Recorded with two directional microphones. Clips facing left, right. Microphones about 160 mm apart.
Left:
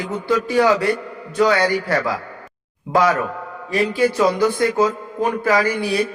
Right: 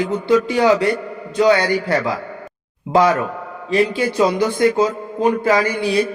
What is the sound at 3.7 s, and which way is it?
A man's voice, 25° right (ahead or behind).